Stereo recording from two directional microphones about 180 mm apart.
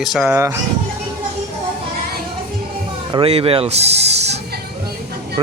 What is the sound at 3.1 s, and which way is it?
Speech, 30° right (ahead or behind).